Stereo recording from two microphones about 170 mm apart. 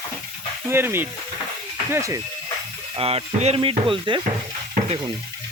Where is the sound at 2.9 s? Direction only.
35° right (ahead or behind).